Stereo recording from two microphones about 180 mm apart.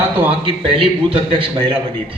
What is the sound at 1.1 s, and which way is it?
Speech, 30° right (ahead or behind).